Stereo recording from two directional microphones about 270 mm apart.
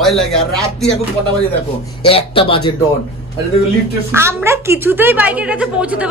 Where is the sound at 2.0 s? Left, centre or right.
Centre.